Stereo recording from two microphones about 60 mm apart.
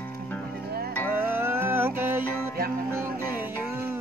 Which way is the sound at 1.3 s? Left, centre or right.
Right.